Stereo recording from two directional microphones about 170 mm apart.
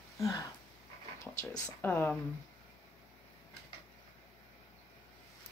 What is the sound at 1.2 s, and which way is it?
Speech, 15° left (ahead or behind).